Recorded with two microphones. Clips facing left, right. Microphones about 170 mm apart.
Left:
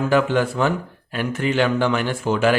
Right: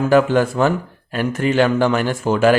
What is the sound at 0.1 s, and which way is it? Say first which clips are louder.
Speech: right 5 dB; 45° right (ahead or behind).